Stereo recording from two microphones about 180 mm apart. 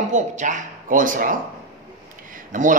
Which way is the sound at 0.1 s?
45° right (ahead or behind).